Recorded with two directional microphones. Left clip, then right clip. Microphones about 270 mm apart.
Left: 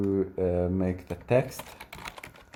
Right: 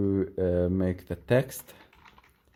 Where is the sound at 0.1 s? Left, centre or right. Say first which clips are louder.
Left 1 dB; right.